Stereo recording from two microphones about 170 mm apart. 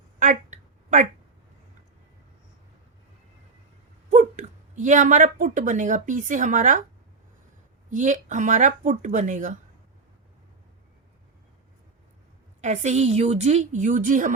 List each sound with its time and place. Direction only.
0.2 s a sound: 50° right (ahead or behind)
4.1 s a woman's voice: 45° right (ahead or behind)
7.9 s a woman's voice: 45° right (ahead or behind)
12.6 s a woman's voice: 45° right (ahead or behind)